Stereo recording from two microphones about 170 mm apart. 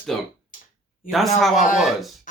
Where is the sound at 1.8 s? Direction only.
Centre (ahead or behind).